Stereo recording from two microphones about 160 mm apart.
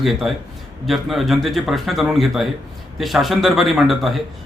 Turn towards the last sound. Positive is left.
turn(degrees=0)  # may be behind; listen again after turning